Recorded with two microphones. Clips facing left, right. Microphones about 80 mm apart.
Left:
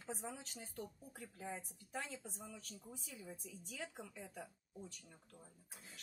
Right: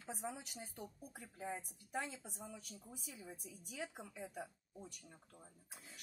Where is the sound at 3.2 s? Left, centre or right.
Centre.